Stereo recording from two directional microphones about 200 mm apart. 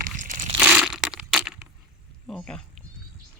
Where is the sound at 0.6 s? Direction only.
5° right (ahead or behind).